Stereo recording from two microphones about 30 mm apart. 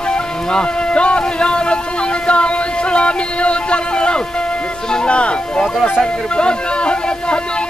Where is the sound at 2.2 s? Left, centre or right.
Left.